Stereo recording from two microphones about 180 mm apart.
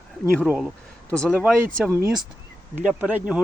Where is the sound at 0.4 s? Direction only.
5° right (ahead or behind).